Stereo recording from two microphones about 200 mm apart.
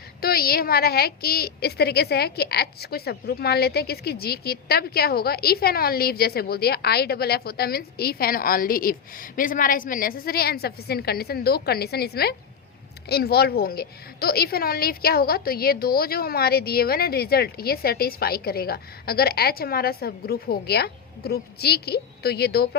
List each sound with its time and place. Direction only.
0.2 s a woman's voice: 50° left (ahead or behind)